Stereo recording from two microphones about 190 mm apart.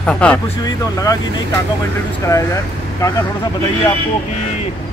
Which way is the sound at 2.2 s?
15° left (ahead or behind).